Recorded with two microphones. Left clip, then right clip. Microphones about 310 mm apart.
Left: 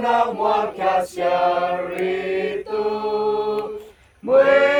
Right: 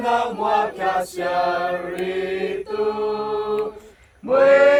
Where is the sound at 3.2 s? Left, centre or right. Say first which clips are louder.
Left 2 dB; left.